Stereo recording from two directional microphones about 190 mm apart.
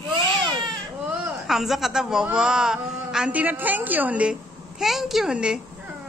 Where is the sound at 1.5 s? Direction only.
Centre (ahead or behind).